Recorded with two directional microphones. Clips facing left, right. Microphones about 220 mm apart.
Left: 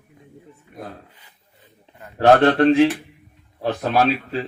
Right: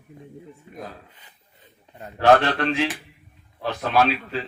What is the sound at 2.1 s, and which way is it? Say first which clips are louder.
Speech: left 4 dB; 50° left (ahead or behind).